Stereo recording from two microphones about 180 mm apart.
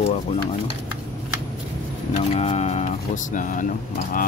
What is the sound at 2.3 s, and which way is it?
Speech, 35° left (ahead or behind).